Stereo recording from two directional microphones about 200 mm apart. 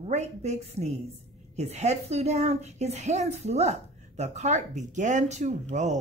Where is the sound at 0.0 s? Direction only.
35° right (ahead or behind).